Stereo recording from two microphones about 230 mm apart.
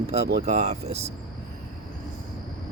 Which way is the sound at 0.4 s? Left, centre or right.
Right.